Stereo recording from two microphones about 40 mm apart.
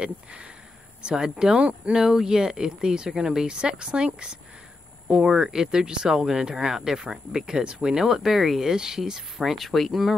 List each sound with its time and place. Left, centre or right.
0.0 s a woman's voice: right
1.0 s a woman's voice: centre
5.4 s speech: centre